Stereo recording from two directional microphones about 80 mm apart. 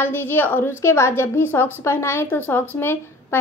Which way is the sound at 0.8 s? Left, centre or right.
Left.